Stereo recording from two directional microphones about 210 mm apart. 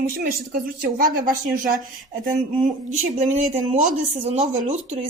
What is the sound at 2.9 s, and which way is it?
A woman's voice, 35° right (ahead or behind).